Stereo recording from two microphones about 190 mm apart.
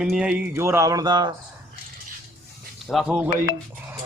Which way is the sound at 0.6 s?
15° right (ahead or behind).